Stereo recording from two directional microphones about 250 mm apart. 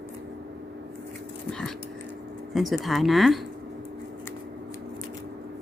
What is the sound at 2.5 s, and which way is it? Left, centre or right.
Speech, centre.